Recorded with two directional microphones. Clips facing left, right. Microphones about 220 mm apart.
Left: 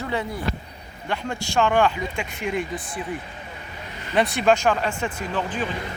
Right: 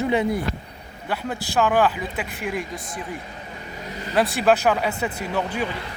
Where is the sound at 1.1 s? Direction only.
5° right (ahead or behind).